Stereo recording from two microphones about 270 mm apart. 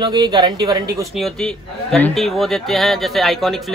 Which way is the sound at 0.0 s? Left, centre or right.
Centre.